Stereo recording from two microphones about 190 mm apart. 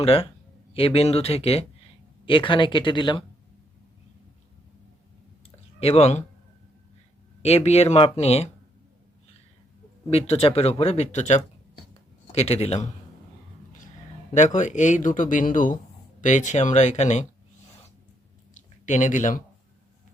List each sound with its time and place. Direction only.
0.0 s speech: 30° left (ahead or behind)
5.8 s speech: 35° left (ahead or behind)
7.4 s speech: 35° left (ahead or behind)
10.1 s speech: 30° left (ahead or behind)
14.3 s speech: 40° left (ahead or behind)
18.5 s a sound: 40° left (ahead or behind)